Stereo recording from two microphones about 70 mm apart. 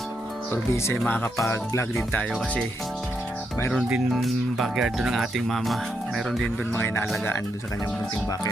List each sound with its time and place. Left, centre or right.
0.5 s speech: left
1.5 s speech: left
3.8 s speech: centre
4.1 s speech: centre
6.7 s speech: left